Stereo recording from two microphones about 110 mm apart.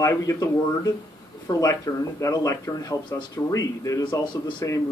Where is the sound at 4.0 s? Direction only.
45° left (ahead or behind).